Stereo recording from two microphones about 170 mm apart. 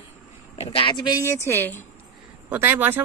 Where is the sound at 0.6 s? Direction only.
35° left (ahead or behind); by 1.8 s 15° left (ahead or behind).